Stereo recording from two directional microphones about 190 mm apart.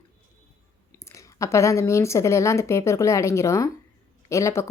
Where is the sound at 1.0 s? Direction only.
15° left (ahead or behind).